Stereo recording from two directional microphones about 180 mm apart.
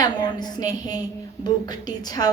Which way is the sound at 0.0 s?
25° left (ahead or behind).